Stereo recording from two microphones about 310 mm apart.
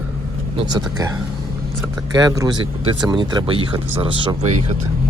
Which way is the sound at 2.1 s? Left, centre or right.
Centre.